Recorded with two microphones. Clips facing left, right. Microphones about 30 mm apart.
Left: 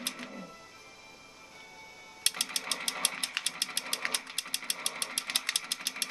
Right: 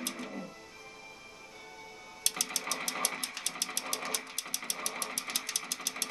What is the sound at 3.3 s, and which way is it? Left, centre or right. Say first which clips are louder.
Ratchet: left 4 dB; left.